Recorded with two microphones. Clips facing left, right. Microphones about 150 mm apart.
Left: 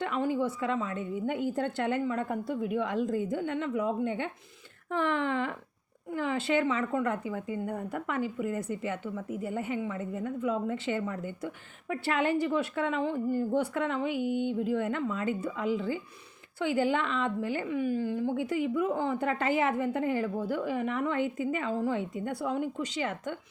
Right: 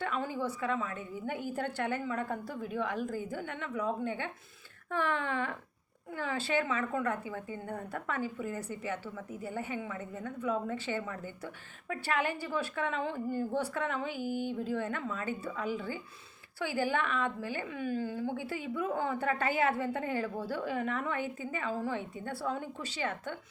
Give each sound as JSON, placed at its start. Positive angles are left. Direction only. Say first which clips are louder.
{"t": 0.0, "sound": "a woman's voice", "louder": "left 5 dB", "side_deg": 20}